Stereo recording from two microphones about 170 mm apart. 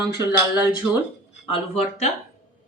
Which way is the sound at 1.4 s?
40° left (ahead or behind).